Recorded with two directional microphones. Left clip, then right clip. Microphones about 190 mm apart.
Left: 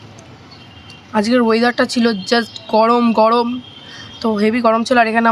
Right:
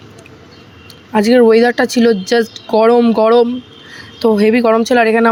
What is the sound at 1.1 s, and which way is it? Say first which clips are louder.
Speech: right 6 dB; 15° right (ahead or behind).